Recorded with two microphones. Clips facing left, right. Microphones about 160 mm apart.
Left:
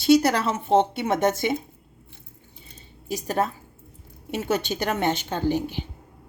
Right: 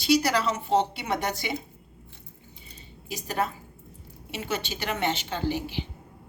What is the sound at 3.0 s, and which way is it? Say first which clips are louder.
Speech: left 4 dB; 45° left (ahead or behind).